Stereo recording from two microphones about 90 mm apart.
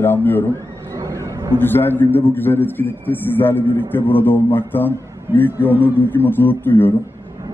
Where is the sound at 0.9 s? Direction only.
40° right (ahead or behind).